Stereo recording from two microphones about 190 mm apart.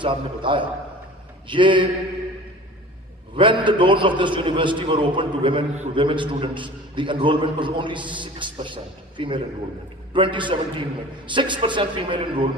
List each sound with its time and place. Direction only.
0.0 s a man's voice: 25° right (ahead or behind)
3.3 s a man's voice: 25° right (ahead or behind)